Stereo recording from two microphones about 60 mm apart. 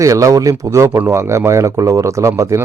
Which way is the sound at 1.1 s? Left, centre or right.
Right.